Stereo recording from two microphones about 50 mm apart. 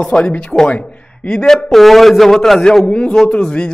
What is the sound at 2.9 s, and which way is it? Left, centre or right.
Speech, centre.